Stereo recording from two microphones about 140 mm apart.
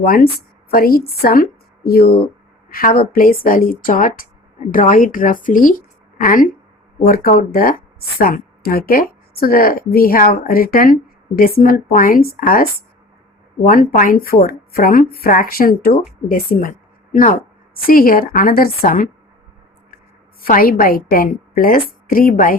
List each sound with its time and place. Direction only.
0.0 s a woman's voice: 90° left
7.0 s a woman's voice: 90° left
13.7 s a woman's voice: 80° left
17.8 s a woman's voice: 90° left
20.4 s a woman's voice: 90° left